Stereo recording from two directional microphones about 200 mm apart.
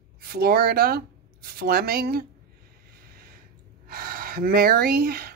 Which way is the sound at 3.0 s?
50° right (ahead or behind).